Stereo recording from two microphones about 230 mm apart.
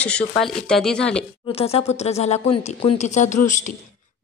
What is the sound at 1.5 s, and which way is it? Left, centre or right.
Speech, left.